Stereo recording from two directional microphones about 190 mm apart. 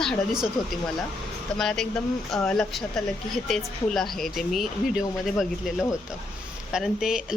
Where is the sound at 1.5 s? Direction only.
Centre (ahead or behind).